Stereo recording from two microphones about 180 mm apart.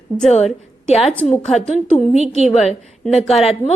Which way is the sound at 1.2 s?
5° left (ahead or behind).